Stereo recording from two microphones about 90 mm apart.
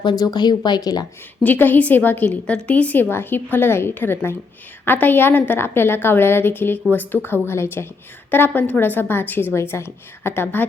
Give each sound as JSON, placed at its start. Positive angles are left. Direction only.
{"t": 0.0, "sound": "speech", "side_deg": 55}
{"t": 1.5, "sound": "a woman's voice", "side_deg": 20}